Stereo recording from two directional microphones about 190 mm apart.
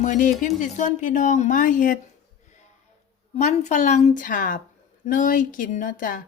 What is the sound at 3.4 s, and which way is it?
A woman's voice, 40° left (ahead or behind).